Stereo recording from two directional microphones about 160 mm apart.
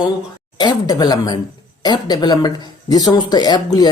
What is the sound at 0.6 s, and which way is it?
A woman's voice, 25° left (ahead or behind).